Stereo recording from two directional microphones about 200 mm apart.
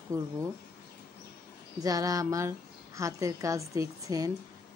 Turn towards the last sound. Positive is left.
turn(degrees=-15)  # may be behind; listen again after turning